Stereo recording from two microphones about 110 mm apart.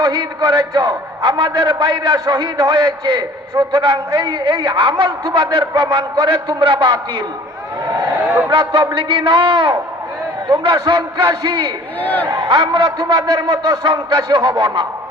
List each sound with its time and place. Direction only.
0.0 s a man's voice: 40° right (ahead or behind)
8.4 s a man's voice: 50° right (ahead or behind)
11.9 s speech: 15° left (ahead or behind)
12.5 s a man's voice: 50° right (ahead or behind)